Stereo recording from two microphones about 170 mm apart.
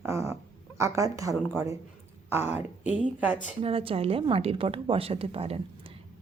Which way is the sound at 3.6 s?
35° right (ahead or behind).